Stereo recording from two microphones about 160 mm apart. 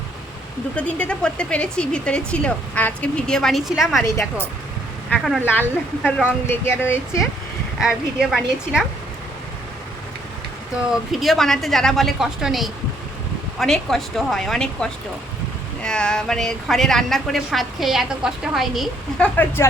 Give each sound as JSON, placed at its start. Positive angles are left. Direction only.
{"t": 0.8, "sound": "a woman's voice", "side_deg": 10}
{"t": 4.0, "sound": "speech", "side_deg": 15}
{"t": 5.1, "sound": "a woman's voice", "side_deg": 0}
{"t": 7.8, "sound": "a woman's voice", "side_deg": 0}
{"t": 11.1, "sound": "a woman's voice", "side_deg": 0}